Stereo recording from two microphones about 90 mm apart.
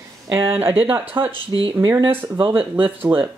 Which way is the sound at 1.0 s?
80° right.